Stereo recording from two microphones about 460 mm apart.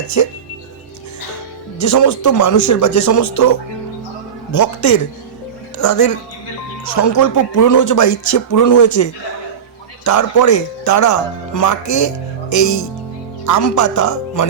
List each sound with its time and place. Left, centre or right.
0.2 s speech: left
1.8 s speech: left